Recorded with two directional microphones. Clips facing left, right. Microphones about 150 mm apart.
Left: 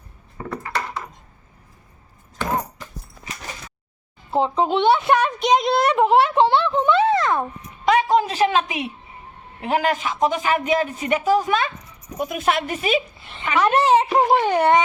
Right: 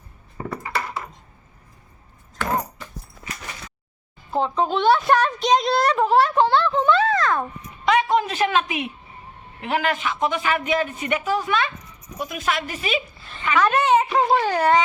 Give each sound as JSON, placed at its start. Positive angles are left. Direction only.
{"t": 0.3, "sound": "a sound", "side_deg": -10}
{"t": 4.3, "sound": "a child's voice", "side_deg": 20}
{"t": 8.1, "sound": "a man's voice", "side_deg": 35}
{"t": 12.1, "sound": "a woman's voice", "side_deg": 50}
{"t": 13.2, "sound": "a woman's voice", "side_deg": 20}
{"t": 13.8, "sound": "a sound", "side_deg": 30}
{"t": 14.2, "sound": "a child's voice", "side_deg": 20}